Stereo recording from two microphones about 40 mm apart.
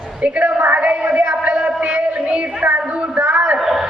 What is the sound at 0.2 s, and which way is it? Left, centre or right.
Speech, right.